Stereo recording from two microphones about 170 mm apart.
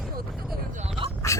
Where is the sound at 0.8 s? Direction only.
30° right (ahead or behind).